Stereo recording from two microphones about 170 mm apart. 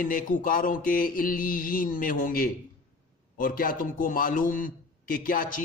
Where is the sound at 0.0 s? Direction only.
55° left (ahead or behind).